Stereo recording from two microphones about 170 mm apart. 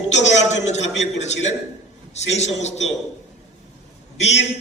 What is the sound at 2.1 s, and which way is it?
Speech, 40° left (ahead or behind).